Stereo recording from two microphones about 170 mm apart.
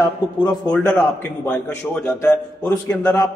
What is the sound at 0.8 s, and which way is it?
A man's voice, 15° left (ahead or behind).